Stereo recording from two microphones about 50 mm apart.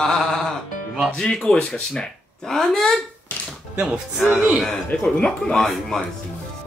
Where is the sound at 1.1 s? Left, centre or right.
Centre.